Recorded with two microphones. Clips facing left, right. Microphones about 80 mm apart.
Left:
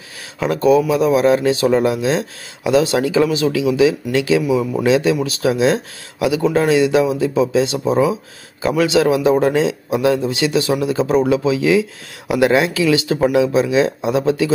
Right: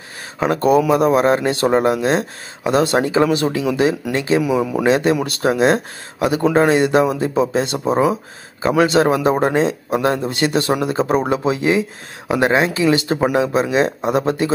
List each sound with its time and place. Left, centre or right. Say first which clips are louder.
0.4 s a man's voice: left 1 dB; right
4.4 s a man's voice: even; right
4.8 s a man's voice: left 1 dB; right